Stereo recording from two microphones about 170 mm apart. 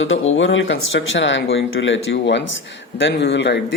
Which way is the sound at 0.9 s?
90° left.